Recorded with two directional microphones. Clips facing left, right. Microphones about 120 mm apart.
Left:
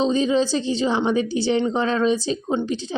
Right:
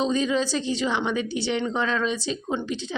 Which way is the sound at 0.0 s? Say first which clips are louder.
Left 4 dB; 30° left (ahead or behind).